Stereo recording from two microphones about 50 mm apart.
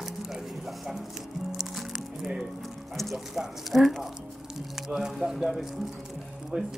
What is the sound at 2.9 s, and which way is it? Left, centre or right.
Speech, centre.